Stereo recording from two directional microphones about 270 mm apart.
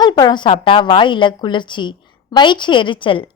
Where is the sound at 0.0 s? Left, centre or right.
Centre.